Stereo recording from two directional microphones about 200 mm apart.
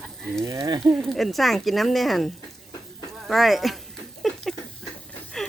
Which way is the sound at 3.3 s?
Centre (ahead or behind).